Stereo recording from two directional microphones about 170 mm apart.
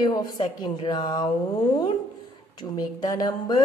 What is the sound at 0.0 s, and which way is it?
Speech, 25° left (ahead or behind).